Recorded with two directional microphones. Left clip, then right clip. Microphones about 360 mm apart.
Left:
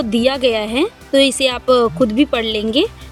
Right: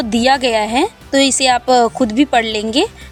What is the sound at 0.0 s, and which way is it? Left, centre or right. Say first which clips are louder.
A woman's voice: right 2 dB; right.